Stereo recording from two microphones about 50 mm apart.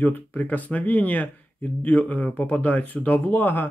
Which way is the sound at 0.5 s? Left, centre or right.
Left.